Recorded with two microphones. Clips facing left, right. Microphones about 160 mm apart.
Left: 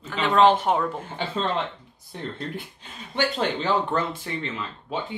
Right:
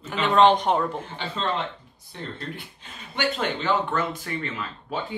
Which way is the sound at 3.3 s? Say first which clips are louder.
Even; 35° left (ahead or behind).